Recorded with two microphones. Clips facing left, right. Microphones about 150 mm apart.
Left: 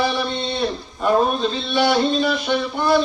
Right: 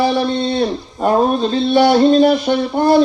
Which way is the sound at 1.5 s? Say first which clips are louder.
Right 7 dB; 40° right (ahead or behind).